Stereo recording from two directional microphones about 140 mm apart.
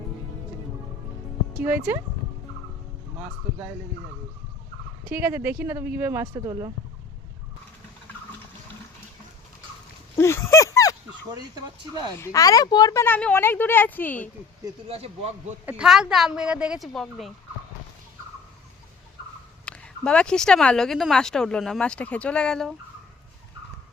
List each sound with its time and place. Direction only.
1.6 s speech: 15° right (ahead or behind)
5.0 s speech: 15° right (ahead or behind)
10.2 s a sound: 20° left (ahead or behind)
11.5 s speech: 30° right (ahead or behind)
12.2 s speech: 25° left (ahead or behind)
14.8 s speech: 45° right (ahead or behind)
15.6 s speech: 5° right (ahead or behind)
19.6 s speech: 10° left (ahead or behind)